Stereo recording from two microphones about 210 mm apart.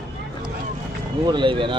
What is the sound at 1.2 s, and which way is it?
Speech, 20° right (ahead or behind).